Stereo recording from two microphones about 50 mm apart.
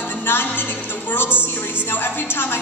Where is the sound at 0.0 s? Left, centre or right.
Left.